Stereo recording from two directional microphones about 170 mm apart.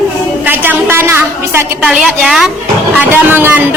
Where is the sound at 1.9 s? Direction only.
Centre (ahead or behind).